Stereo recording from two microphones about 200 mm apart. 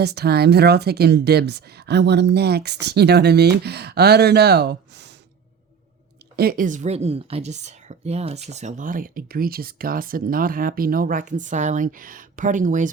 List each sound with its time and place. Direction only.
0.0 s speech: 55° right (ahead or behind)
6.3 s a woman's voice: 50° right (ahead or behind)